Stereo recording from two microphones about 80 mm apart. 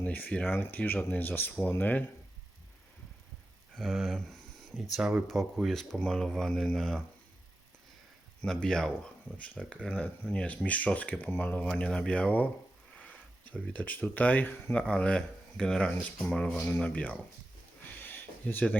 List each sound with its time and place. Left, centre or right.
0.0 s speech: centre
3.8 s speech: centre
8.4 s speech: centre
16.6 s speech: centre
17.8 s a sound: left